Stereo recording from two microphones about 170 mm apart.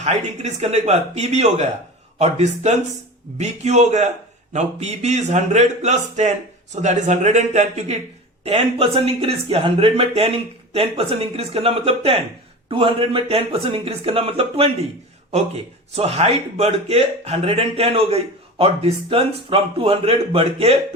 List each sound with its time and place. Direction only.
0.0 s a man's voice: 40° right (ahead or behind)
16.0 s a man's voice: 35° right (ahead or behind)